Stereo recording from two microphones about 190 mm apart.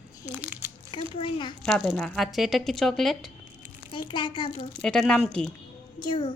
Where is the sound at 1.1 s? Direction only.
25° left (ahead or behind).